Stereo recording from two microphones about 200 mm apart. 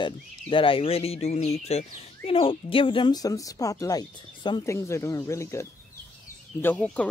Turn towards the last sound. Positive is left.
turn(degrees=5)  # may be behind; listen again after turning